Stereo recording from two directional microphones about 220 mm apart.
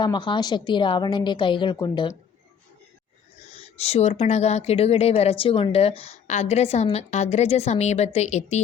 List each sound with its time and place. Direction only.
0.0 s a woman's voice: 20° left (ahead or behind)
3.5 s a woman's voice: 30° left (ahead or behind)